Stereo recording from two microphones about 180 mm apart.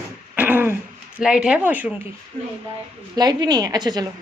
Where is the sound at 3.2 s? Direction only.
20° right (ahead or behind).